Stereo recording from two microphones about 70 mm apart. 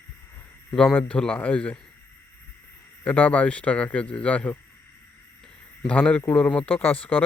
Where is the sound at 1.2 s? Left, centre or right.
Centre.